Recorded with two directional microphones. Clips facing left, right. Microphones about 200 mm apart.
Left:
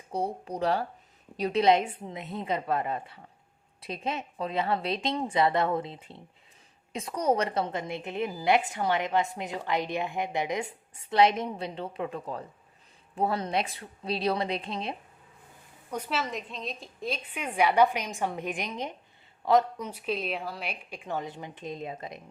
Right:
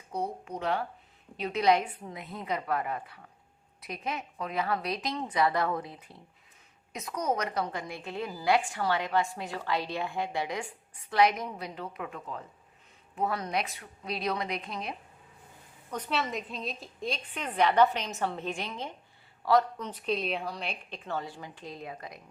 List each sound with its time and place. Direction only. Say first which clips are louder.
0.1 s speech: left 3 dB; 30° left (ahead or behind)
1.6 s a woman's voice: left 1 dB; 25° left (ahead or behind)
15.9 s a woman's voice: even; 5° left (ahead or behind)
19.8 s a woman's voice: even; 10° left (ahead or behind)